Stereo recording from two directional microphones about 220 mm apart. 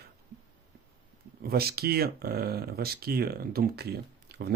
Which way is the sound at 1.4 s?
45° right (ahead or behind).